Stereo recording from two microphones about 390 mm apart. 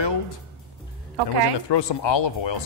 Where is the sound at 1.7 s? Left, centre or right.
Left.